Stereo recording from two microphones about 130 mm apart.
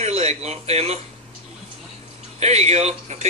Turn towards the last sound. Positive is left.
turn(degrees=-55)  # may be behind; listen again after turning